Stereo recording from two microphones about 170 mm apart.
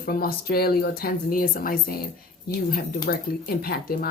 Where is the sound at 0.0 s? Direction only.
60° left (ahead or behind).